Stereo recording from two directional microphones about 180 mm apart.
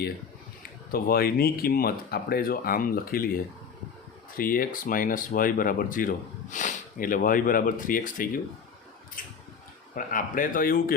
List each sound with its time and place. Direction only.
0.9 s speech: 55° left (ahead or behind)